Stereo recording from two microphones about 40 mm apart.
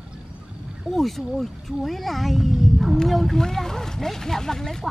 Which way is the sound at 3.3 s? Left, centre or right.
Centre.